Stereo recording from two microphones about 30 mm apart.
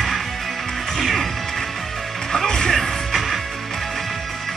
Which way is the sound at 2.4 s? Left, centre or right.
Centre.